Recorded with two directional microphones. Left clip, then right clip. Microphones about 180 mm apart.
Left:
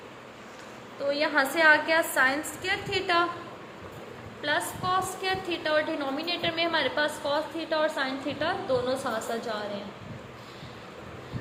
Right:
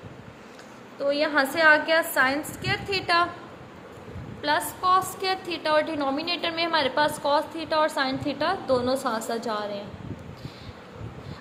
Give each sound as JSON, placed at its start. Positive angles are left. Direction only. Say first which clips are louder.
{"t": 1.0, "sound": "a woman's voice", "louder": "right 2 dB", "side_deg": -15}
{"t": 4.4, "sound": "a woman's voice", "louder": "right 5 dB", "side_deg": -25}